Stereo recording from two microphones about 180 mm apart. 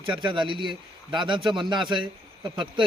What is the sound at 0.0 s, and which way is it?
Speech, 25° right (ahead or behind).